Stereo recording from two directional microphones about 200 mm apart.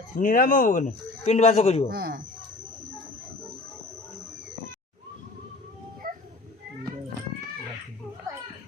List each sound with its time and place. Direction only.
0.2 s a man's voice: 45° left (ahead or behind)
1.9 s speech: 50° right (ahead or behind)
6.0 s a sound: 45° right (ahead or behind)